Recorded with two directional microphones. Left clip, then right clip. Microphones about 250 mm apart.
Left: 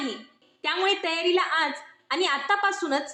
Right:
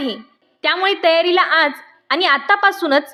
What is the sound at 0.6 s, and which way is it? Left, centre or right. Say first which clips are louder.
A woman's voice: right 9 dB; right.